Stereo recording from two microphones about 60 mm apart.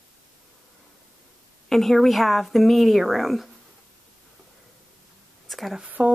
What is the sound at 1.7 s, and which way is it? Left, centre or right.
A woman's voice, centre.